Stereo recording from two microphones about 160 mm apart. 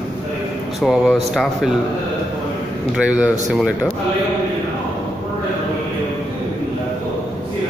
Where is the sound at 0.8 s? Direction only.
Centre (ahead or behind).